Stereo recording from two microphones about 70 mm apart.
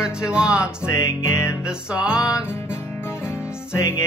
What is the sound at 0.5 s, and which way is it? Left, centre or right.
Music, left.